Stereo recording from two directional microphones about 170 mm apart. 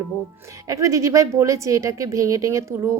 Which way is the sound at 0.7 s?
20° right (ahead or behind).